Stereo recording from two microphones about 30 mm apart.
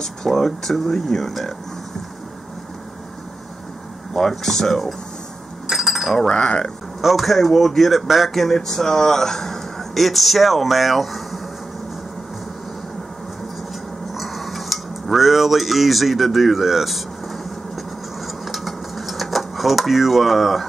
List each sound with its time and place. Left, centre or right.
0.0 s speech: centre
4.1 s speech: centre
5.7 s cutlery: centre
6.2 s speech: left
7.0 s speech: centre
14.1 s cutlery: centre
18.2 s dishes: centre